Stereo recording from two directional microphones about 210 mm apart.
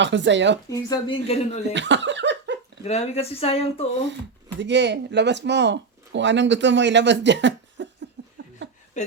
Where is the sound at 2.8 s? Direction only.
30° left (ahead or behind).